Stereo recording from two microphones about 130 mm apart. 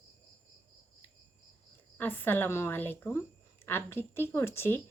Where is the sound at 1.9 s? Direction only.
15° left (ahead or behind).